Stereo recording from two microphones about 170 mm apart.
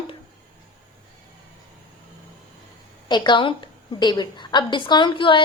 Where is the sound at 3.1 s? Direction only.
30° left (ahead or behind).